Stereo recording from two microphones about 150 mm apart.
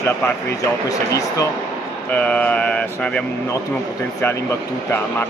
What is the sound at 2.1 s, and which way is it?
Speech, 10° left (ahead or behind).